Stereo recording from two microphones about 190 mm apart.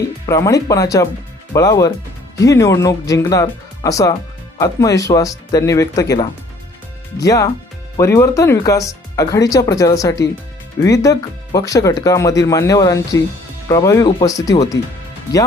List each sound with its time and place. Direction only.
0.3 s speech: 15° left (ahead or behind)